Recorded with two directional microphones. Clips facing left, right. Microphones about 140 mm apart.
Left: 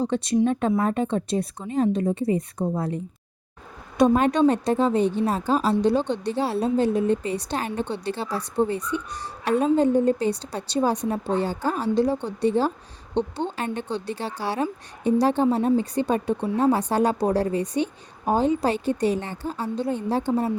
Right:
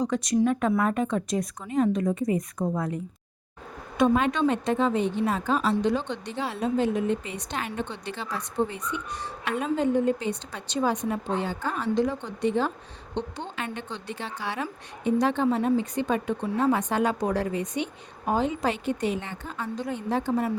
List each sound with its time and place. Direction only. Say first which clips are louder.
0.0 s speech: left 2 dB; 30° left (ahead or behind)